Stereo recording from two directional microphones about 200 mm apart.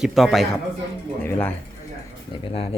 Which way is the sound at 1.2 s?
10° left (ahead or behind).